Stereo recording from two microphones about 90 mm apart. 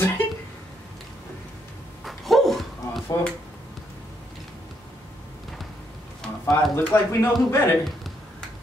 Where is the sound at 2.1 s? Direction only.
Centre (ahead or behind).